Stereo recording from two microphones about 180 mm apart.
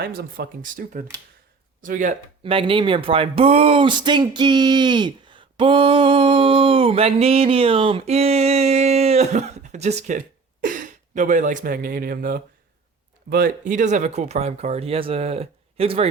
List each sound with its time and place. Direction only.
0.0 s speech: 55° right (ahead or behind)
2.4 s speech: 30° right (ahead or behind)
10.6 s speech: 50° right (ahead or behind); by 16.0 s 35° right (ahead or behind)